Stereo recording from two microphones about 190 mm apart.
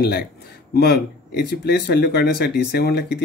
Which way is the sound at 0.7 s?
60° left (ahead or behind).